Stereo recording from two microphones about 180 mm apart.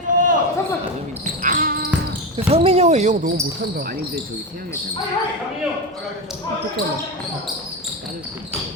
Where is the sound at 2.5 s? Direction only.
35° right (ahead or behind).